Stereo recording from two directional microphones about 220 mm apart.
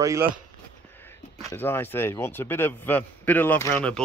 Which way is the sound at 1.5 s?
10° left (ahead or behind).